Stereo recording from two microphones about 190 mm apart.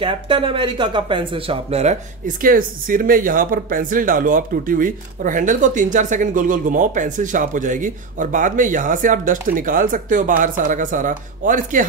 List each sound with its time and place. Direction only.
0.0 s speech: 25° right (ahead or behind); by 11.8 s 45° right (ahead or behind)